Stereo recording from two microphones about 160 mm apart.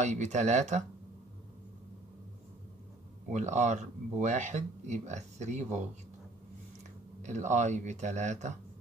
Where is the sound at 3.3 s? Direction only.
45° right (ahead or behind).